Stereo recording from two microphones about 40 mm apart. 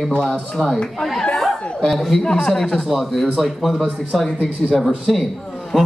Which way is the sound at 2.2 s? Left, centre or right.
Centre.